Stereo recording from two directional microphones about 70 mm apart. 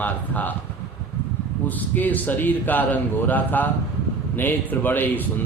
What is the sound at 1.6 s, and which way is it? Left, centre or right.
A man's voice, left.